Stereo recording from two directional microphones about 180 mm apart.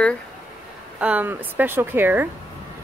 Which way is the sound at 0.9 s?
10° right (ahead or behind).